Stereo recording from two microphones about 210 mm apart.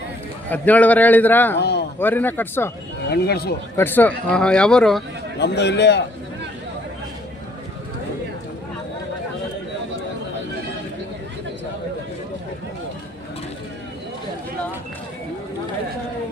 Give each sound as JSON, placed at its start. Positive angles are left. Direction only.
{"t": 0.5, "sound": "a man's voice", "side_deg": 10}
{"t": 3.1, "sound": "a man's voice", "side_deg": 50}
{"t": 3.8, "sound": "a man's voice", "side_deg": 10}
{"t": 5.4, "sound": "a man's voice", "side_deg": 55}